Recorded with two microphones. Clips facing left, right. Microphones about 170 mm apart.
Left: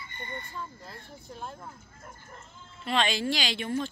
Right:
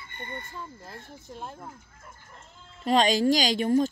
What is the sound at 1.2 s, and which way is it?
Speech, 20° right (ahead or behind).